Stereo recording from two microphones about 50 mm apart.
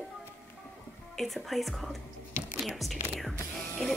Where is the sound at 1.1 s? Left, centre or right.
Centre.